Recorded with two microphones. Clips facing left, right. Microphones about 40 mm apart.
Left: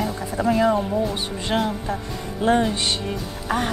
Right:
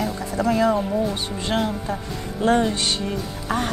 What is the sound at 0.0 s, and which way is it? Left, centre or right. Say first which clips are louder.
Speech: even; centre.